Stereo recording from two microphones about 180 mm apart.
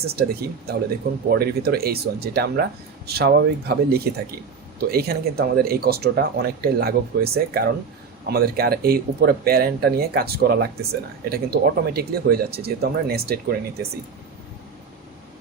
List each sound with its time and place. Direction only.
0.0 s speech: 60° right (ahead or behind)